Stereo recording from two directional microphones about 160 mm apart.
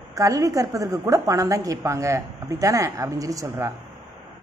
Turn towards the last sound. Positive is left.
turn(degrees=-20)  # may be behind; listen again after turning